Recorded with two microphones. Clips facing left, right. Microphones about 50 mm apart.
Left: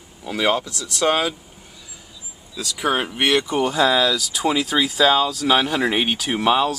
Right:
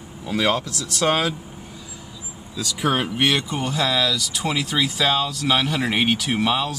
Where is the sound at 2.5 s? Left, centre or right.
Centre.